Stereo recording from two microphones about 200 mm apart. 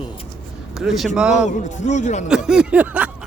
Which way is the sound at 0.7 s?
Centre (ahead or behind).